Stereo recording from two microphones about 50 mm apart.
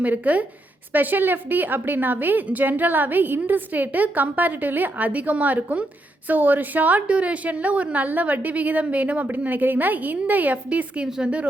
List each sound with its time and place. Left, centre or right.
0.0 s a woman's voice: right